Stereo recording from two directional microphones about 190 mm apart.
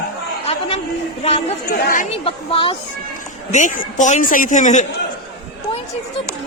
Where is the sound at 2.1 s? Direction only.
30° left (ahead or behind).